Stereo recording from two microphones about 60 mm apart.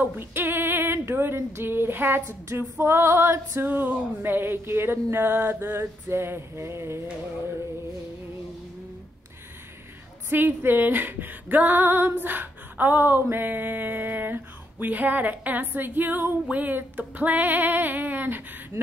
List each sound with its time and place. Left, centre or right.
0.0 s a sound: right
1.5 s speech: right
10.3 s speech: right